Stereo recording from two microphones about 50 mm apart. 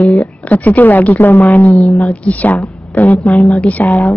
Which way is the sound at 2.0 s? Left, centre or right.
Left.